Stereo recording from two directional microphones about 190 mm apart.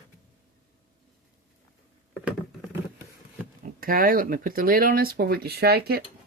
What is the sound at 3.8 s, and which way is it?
Speech, 50° right (ahead or behind).